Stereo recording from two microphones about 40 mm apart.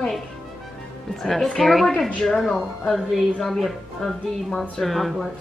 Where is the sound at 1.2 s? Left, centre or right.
Centre.